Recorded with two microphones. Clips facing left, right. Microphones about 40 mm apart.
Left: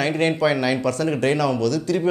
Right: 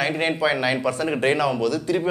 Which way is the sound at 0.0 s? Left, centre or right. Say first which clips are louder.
Left 2 dB; centre.